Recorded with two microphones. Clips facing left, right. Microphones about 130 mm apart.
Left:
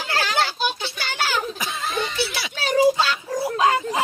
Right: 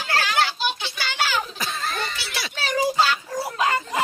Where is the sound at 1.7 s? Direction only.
Centre (ahead or behind).